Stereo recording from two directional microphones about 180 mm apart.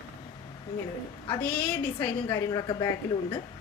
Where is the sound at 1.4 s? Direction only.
10° left (ahead or behind).